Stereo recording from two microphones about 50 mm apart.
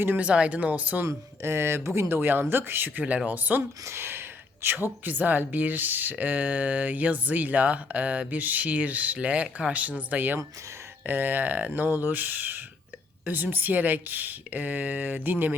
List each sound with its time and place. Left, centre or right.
0.2 s speech: right
1.0 s speech: right
3.8 s speech: right
4.6 s speech: right